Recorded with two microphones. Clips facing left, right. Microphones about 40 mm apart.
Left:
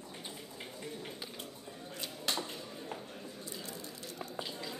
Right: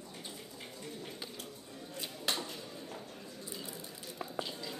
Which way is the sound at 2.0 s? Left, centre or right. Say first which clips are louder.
Even; centre.